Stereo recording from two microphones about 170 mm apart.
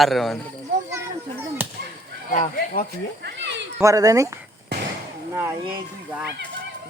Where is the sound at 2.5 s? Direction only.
60° left (ahead or behind).